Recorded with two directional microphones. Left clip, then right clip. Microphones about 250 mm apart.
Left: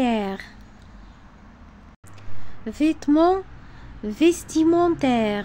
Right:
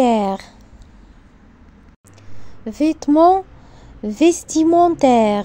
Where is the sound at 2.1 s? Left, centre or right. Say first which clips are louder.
Even; centre.